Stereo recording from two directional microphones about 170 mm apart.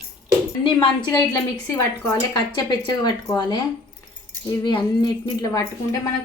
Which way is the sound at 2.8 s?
25° left (ahead or behind).